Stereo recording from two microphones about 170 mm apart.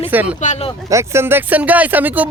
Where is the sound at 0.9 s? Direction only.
15° right (ahead or behind).